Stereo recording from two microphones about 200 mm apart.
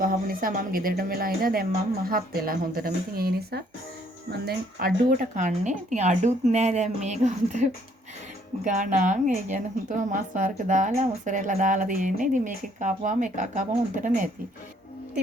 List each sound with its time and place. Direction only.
0.0 s speech: 45° right (ahead or behind)
5.1 s a woman's voice: 40° right (ahead or behind)